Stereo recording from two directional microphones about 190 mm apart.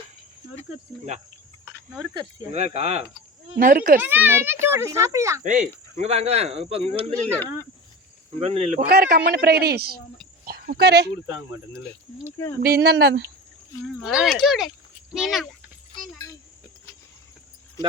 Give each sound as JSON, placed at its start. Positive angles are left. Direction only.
{"t": 2.5, "sound": "speech", "side_deg": -35}
{"t": 3.6, "sound": "speech", "side_deg": -50}
{"t": 4.0, "sound": "speech", "side_deg": -10}
{"t": 5.4, "sound": "speech", "side_deg": -40}
{"t": 8.4, "sound": "speech", "side_deg": -35}
{"t": 8.9, "sound": "a man's voice", "side_deg": -55}
{"t": 12.5, "sound": "a man's voice", "side_deg": -55}
{"t": 14.0, "sound": "speech", "side_deg": 0}